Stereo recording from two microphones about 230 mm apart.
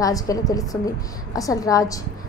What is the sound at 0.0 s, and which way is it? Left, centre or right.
A woman's voice, centre.